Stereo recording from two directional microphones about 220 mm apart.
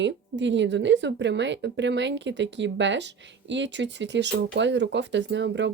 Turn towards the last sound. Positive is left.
turn(degrees=-55)  # may be behind; listen again after turning